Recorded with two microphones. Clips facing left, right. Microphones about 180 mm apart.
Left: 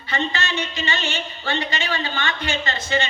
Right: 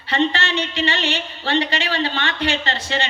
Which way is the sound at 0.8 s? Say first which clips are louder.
Right 4 dB; 35° right (ahead or behind).